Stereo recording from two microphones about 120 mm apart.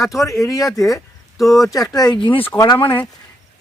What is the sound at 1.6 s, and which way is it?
Speech, 30° left (ahead or behind).